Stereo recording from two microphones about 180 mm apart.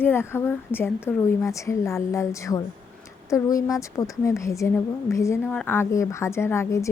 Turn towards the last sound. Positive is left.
turn(degrees=15)  # may be behind; listen again after turning